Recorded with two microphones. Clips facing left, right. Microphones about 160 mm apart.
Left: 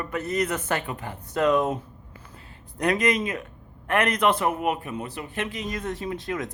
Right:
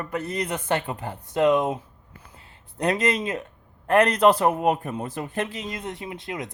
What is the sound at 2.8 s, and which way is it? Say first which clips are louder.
A man's voice: even; 30° right (ahead or behind).